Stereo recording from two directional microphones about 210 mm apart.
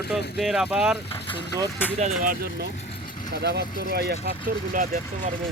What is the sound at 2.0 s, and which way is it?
Speech, 35° right (ahead or behind).